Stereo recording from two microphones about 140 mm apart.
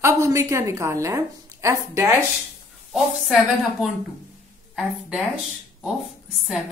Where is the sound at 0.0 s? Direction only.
20° right (ahead or behind).